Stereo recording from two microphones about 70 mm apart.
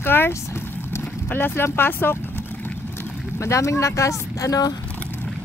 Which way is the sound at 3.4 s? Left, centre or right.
Left.